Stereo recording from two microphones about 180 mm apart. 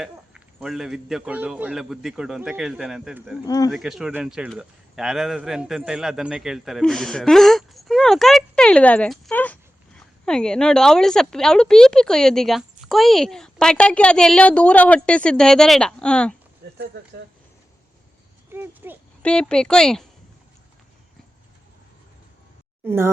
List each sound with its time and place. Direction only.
0.0 s a man's voice: centre (ahead or behind)
3.4 s speech: 20° left (ahead or behind)
3.7 s a man's voice: centre (ahead or behind)
16.7 s speech: 70° right (ahead or behind)
18.5 s speech: 10° right (ahead or behind)
19.2 s a man's voice: 5° left (ahead or behind)